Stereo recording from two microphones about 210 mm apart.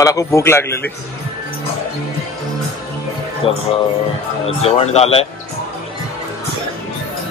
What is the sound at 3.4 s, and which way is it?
Speech, 25° left (ahead or behind).